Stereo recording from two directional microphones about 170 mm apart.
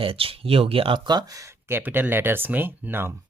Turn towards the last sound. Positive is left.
turn(degrees=-10)  # may be behind; listen again after turning